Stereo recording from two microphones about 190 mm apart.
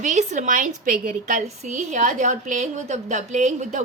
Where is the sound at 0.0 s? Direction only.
40° right (ahead or behind).